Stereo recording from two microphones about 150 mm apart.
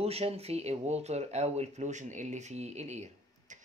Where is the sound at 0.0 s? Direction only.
40° right (ahead or behind).